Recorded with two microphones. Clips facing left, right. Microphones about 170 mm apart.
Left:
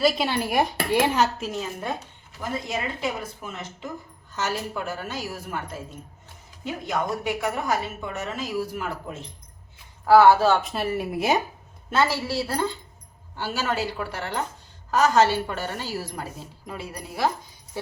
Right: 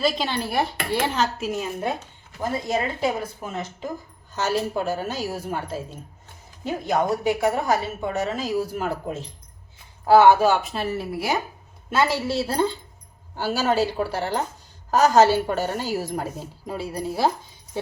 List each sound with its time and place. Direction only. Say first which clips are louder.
0.0 s speech: left 1 dB; 10° left (ahead or behind)
1.4 s speech: right 3 dB; 5° right (ahead or behind)
2.4 s a woman's voice: right 5 dB; 35° right (ahead or behind)
10.1 s speech: right 1 dB; 20° right (ahead or behind)
10.6 s speech: even; centre (ahead or behind)
10.9 s speech: left 4 dB; 15° left (ahead or behind)
11.9 s a woman's voice: right 2 dB; 15° right (ahead or behind)
13.3 s a woman's voice: right 5 dB; 40° right (ahead or behind)
16.6 s a woman's voice: right 8 dB; 30° right (ahead or behind)